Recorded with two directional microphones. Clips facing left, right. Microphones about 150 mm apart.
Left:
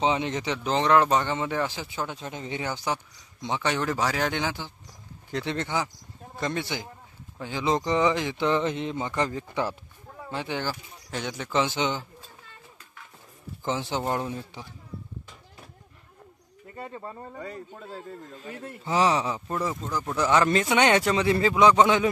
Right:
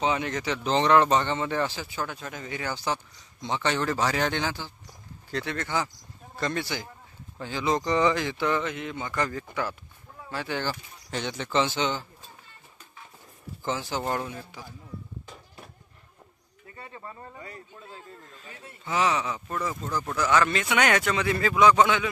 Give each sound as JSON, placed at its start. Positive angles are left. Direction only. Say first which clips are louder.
{"t": 0.0, "sound": "speech", "louder": "left 2 dB", "side_deg": 20}
{"t": 0.7, "sound": "speech", "louder": "right 1 dB", "side_deg": 5}
{"t": 10.6, "sound": "speech", "louder": "even", "side_deg": 5}
{"t": 13.7, "sound": "speech", "louder": "left 1 dB", "side_deg": 20}
{"t": 18.5, "sound": "a man's voice", "louder": "left 9 dB", "side_deg": 55}
{"t": 18.9, "sound": "speech", "louder": "left 3 dB", "side_deg": 30}
{"t": 19.9, "sound": "speech", "louder": "even", "side_deg": 15}
{"t": 20.2, "sound": "speech", "louder": "left 2 dB", "side_deg": 30}